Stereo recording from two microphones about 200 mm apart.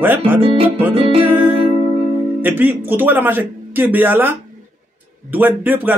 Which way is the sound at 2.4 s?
10° right (ahead or behind).